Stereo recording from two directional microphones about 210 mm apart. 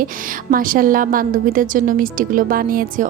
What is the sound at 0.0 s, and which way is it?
A woman's voice, 40° right (ahead or behind).